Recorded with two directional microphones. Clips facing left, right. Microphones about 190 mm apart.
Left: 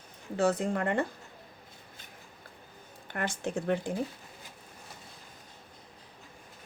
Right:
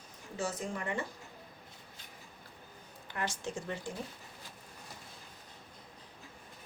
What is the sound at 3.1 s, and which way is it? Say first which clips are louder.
Speech: left 5 dB; 55° left (ahead or behind).